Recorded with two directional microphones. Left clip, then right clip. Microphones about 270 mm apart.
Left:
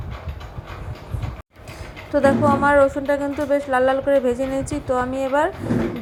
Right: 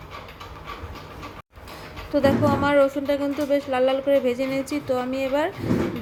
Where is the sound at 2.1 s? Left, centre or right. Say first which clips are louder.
Left 4 dB; centre.